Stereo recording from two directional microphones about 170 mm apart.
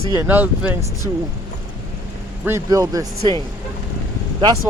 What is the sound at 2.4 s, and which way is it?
Speech, 20° right (ahead or behind).